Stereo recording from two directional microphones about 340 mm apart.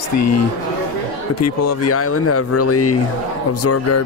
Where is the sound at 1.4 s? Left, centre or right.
Left.